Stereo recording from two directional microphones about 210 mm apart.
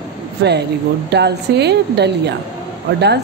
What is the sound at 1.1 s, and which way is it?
Speech, 55° right (ahead or behind).